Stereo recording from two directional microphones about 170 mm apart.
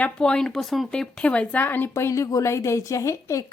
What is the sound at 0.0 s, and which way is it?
Speech, 5° left (ahead or behind).